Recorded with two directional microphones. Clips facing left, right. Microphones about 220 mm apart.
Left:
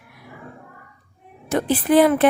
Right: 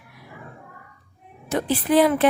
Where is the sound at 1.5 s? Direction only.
50° left (ahead or behind).